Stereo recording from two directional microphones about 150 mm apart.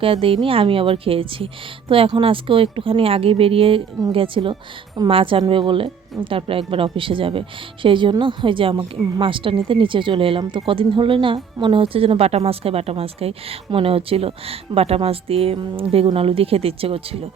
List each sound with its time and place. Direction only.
0.0 s a woman's voice: 35° right (ahead or behind)